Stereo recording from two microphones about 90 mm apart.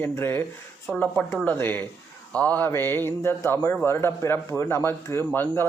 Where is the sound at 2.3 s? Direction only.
15° left (ahead or behind).